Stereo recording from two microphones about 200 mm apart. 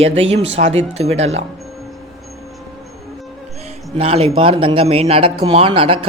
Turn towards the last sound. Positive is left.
turn(degrees=-25)  # may be behind; listen again after turning